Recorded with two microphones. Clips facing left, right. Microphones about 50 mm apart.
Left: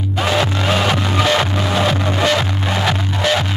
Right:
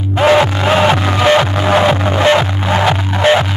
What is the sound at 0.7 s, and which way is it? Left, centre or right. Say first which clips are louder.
Music: right 5 dB; right.